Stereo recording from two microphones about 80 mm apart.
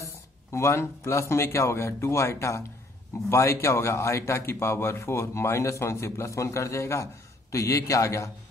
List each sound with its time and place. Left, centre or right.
0.5 s a man's voice: left